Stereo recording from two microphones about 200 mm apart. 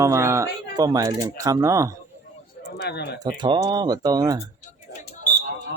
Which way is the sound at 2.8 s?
55° left (ahead or behind).